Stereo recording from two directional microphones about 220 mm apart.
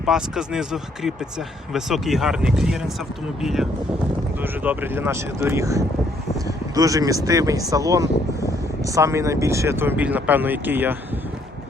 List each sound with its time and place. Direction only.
0.0 s speech: 5° right (ahead or behind)